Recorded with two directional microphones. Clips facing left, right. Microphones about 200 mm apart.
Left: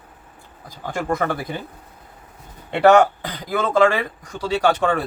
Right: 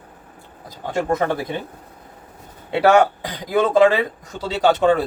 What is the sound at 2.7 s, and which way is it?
Speech, 5° right (ahead or behind).